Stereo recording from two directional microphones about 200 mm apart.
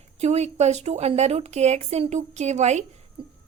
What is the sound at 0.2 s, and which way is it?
Speech, 35° right (ahead or behind).